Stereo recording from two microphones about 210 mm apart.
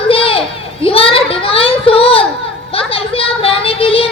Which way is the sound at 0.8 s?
25° left (ahead or behind).